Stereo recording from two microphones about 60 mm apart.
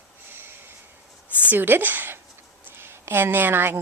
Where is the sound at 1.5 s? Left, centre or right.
Right.